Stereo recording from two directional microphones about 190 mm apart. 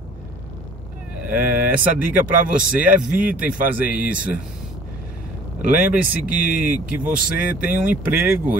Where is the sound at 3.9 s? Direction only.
10° right (ahead or behind).